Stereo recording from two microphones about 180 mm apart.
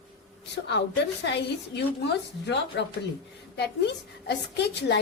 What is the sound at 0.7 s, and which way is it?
A woman's voice, 75° left (ahead or behind).